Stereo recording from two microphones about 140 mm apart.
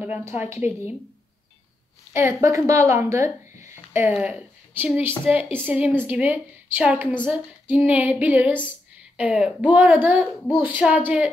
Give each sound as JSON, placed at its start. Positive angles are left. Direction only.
{"t": 0.0, "sound": "speech", "side_deg": -15}
{"t": 2.1, "sound": "a woman's voice", "side_deg": -20}